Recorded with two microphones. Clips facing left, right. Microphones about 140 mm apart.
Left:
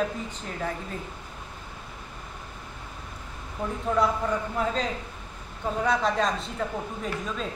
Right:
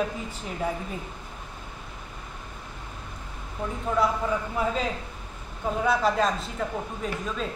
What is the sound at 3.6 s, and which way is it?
A woman's voice, 5° left (ahead or behind).